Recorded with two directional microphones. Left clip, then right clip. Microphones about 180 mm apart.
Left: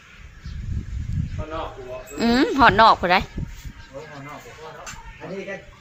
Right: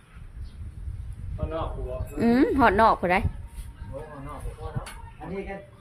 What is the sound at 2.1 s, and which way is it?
A woman's voice, 10° right (ahead or behind).